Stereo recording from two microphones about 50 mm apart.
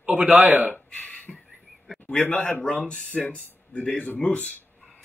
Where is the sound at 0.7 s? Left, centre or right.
Left.